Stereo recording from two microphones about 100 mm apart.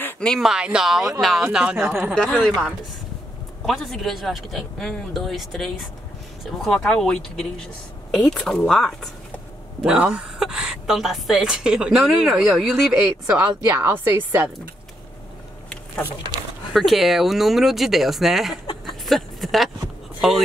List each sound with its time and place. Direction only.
0.4 s a woman's voice: 5° right (ahead or behind)
2.1 s a woman's voice: 5° left (ahead or behind)
9.8 s a woman's voice: 10° right (ahead or behind)
13.3 s a woman's voice: 15° right (ahead or behind)
13.7 s a woman's voice: 25° right (ahead or behind)
16.3 s speech: 40° right (ahead or behind)
16.7 s a woman's voice: centre (ahead or behind)
18.9 s a sound: centre (ahead or behind)
20.2 s speech: centre (ahead or behind)